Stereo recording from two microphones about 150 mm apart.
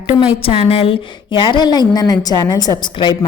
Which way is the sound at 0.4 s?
40° left (ahead or behind).